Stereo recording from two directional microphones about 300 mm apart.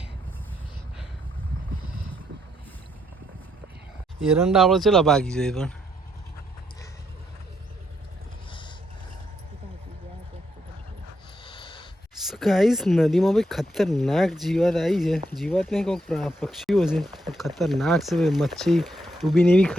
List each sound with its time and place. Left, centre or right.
4.2 s speech: centre
8.4 s vehicle: centre
11.4 s a sound: centre
12.3 s speech: centre